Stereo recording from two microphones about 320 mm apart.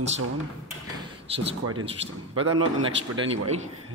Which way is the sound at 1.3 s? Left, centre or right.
Centre.